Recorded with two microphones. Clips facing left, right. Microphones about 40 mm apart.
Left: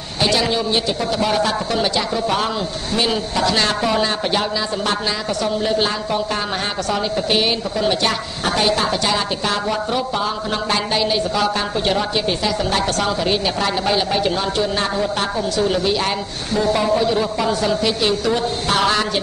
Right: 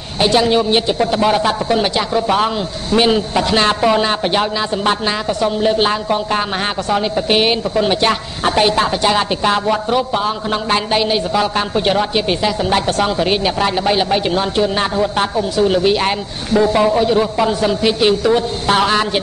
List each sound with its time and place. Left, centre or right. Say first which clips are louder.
0.2 s a woman's voice: right 5 dB; right